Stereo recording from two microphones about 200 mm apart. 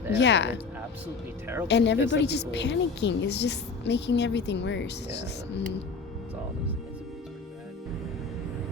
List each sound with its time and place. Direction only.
0.1 s a woman's voice: 60° left (ahead or behind)
1.6 s a woman's voice: 60° left (ahead or behind)